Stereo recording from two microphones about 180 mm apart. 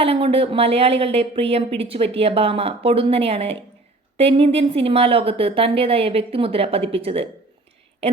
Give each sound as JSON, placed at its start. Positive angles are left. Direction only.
{"t": 0.0, "sound": "speech", "side_deg": -30}